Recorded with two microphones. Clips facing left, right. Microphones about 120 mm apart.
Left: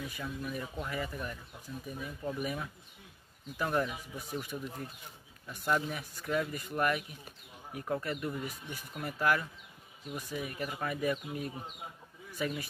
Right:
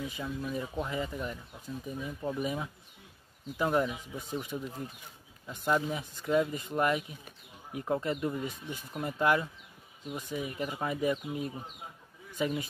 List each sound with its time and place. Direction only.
0.0 s speech: 20° right (ahead or behind)